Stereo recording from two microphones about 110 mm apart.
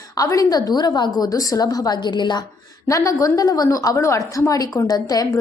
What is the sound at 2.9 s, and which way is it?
A woman's voice, 30° left (ahead or behind).